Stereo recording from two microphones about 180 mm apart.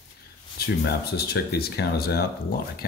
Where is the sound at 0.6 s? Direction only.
60° left (ahead or behind).